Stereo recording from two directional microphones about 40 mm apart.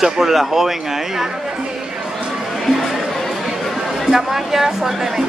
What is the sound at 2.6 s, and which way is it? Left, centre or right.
Chatter, centre.